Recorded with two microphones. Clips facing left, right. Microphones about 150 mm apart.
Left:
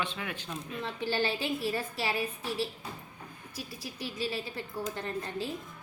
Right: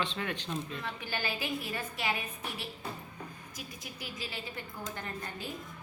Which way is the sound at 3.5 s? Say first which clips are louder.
Left 4 dB; 30° left (ahead or behind).